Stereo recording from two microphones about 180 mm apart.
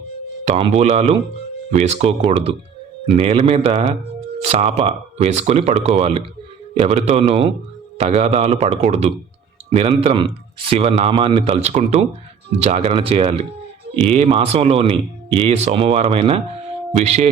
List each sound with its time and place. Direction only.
0.4 s speech: 35° right (ahead or behind)